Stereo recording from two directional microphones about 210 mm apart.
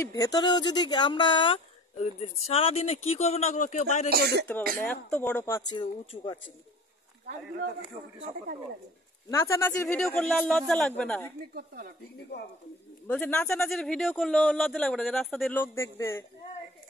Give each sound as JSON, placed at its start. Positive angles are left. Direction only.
{"t": 0.1, "sound": "speech", "side_deg": 20}
{"t": 4.1, "sound": "speech", "side_deg": -50}
{"t": 4.7, "sound": "a man's voice", "side_deg": 5}
{"t": 5.7, "sound": "speech", "side_deg": 20}
{"t": 9.3, "sound": "a man's voice", "side_deg": 10}
{"t": 11.5, "sound": "speech", "side_deg": -45}
{"t": 13.0, "sound": "a man's voice", "side_deg": 5}